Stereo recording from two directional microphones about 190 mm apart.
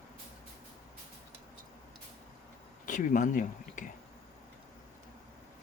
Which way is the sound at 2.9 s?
40° left (ahead or behind).